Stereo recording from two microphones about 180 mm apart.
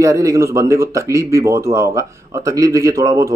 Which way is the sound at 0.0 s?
15° right (ahead or behind).